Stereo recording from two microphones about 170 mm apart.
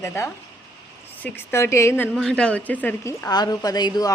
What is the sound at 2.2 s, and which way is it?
A woman's voice, 5° left (ahead or behind).